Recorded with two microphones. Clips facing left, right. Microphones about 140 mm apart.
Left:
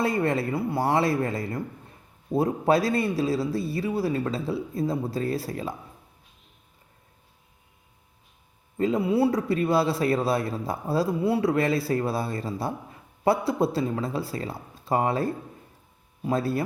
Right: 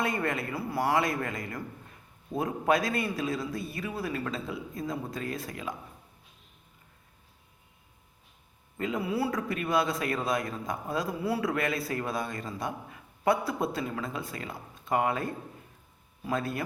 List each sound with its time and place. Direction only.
0.0 s speech: 30° left (ahead or behind)
8.8 s speech: 30° left (ahead or behind)